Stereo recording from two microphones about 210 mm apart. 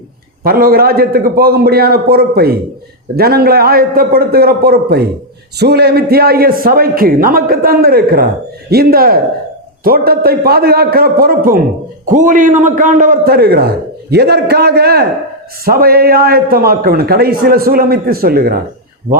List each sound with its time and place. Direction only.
0.4 s a man's voice: 45° right (ahead or behind)